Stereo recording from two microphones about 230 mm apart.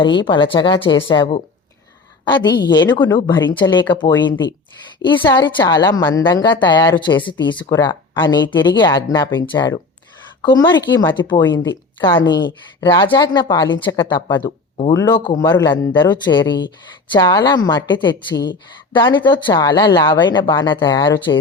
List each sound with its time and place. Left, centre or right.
0.0 s speech: centre